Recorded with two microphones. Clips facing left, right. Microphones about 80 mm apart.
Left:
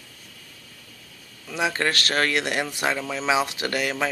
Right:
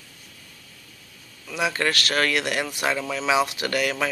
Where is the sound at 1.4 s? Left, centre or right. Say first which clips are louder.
Even; left.